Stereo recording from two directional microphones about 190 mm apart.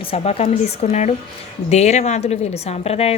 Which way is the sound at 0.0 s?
30° left (ahead or behind).